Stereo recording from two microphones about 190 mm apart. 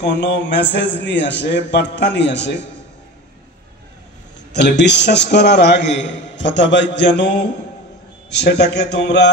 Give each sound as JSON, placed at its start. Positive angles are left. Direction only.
{"t": 0.0, "sound": "a man's voice", "side_deg": 65}
{"t": 4.6, "sound": "a man's voice", "side_deg": 65}